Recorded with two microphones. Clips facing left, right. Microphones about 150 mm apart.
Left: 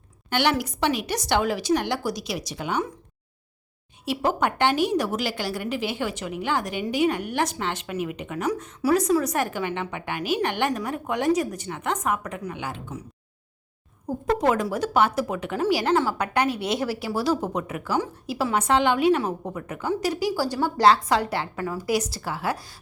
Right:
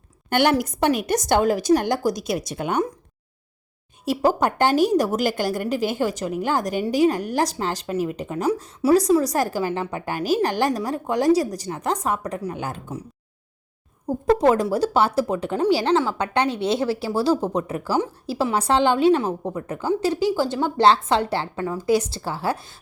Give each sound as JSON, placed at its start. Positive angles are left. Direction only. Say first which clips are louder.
{"t": 0.3, "sound": "a woman's voice", "louder": "right 4 dB", "side_deg": -50}
{"t": 4.0, "sound": "a woman's voice", "louder": "right 4 dB", "side_deg": -40}
{"t": 14.3, "sound": "a woman's voice", "louder": "right 5 dB", "side_deg": -30}